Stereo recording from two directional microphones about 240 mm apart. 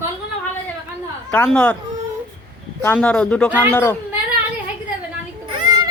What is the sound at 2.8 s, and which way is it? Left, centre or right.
A child's voice, centre.